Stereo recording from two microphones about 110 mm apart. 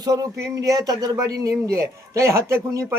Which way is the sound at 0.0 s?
35° right (ahead or behind).